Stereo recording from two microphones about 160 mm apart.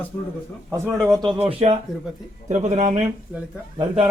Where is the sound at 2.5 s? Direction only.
50° right (ahead or behind).